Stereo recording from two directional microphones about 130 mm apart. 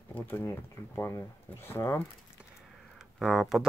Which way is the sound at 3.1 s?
Centre (ahead or behind).